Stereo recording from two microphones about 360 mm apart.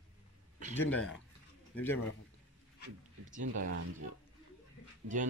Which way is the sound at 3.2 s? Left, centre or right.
Right.